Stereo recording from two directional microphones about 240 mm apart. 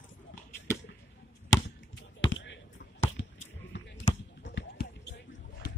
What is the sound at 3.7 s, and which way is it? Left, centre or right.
Basketball bounce, left.